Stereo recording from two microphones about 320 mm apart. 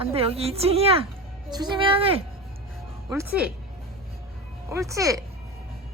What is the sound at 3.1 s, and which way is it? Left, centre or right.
Speech, centre.